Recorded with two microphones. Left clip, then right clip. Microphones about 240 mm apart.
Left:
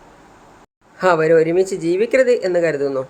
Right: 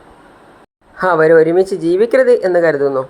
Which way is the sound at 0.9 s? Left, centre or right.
Centre.